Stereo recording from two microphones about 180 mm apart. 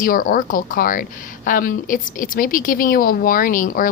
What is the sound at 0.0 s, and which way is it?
Speech, 50° left (ahead or behind).